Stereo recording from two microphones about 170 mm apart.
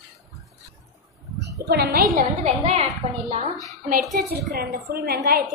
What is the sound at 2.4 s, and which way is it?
A woman's voice, 40° right (ahead or behind).